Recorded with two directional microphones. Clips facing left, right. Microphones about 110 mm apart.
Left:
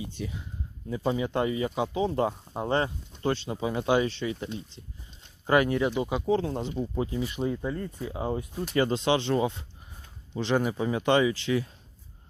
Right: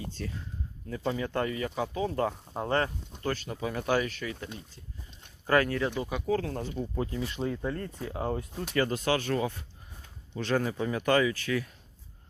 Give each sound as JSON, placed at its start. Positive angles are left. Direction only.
{"t": 0.0, "sound": "speech", "side_deg": 15}
{"t": 5.5, "sound": "speech", "side_deg": 20}
{"t": 8.7, "sound": "speech", "side_deg": 25}